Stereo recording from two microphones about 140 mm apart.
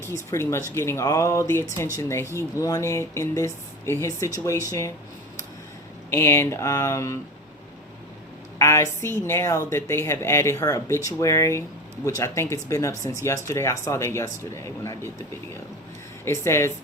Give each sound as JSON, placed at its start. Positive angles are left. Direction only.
{"t": 0.3, "sound": "a woman's voice", "side_deg": 20}
{"t": 6.1, "sound": "a woman's voice", "side_deg": 20}
{"t": 8.5, "sound": "a woman's voice", "side_deg": 20}
{"t": 16.2, "sound": "a woman's voice", "side_deg": 20}